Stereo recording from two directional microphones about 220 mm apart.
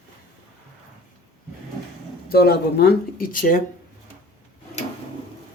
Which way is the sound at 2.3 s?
45° left (ahead or behind).